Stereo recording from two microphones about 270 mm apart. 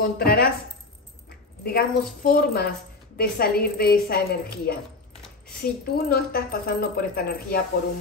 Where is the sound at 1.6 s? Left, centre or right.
Left.